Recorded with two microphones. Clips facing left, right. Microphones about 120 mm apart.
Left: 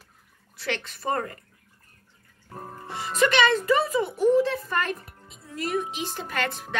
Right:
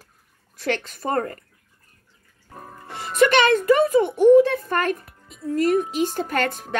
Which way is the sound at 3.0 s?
55° right (ahead or behind).